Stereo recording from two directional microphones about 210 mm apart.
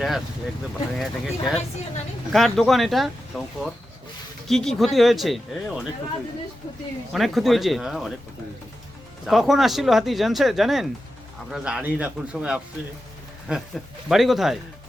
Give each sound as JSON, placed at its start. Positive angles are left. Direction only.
{"t": 0.9, "sound": "speech", "side_deg": 0}
{"t": 7.1, "sound": "speech", "side_deg": 0}
{"t": 9.2, "sound": "speech", "side_deg": 0}